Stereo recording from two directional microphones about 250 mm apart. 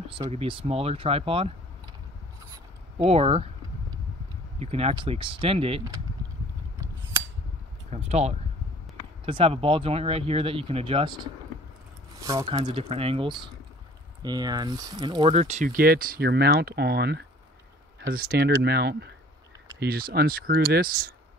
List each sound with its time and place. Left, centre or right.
0.1 s speech: right
2.5 s speech: right
4.6 s speech: right
7.9 s speech: right